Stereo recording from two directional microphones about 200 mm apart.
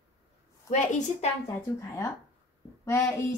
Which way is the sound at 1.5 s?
15° left (ahead or behind).